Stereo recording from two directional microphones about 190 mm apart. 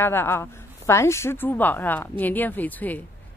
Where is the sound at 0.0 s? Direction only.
10° left (ahead or behind).